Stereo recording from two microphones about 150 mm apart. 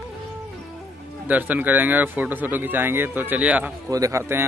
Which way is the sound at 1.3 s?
10° right (ahead or behind).